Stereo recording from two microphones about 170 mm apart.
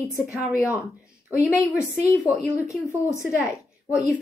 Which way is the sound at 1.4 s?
15° left (ahead or behind).